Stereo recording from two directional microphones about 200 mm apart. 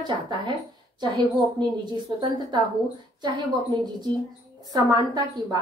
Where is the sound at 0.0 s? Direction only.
20° right (ahead or behind).